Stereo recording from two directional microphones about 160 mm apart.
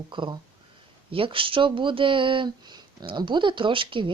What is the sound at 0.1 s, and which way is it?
Speech, 30° right (ahead or behind).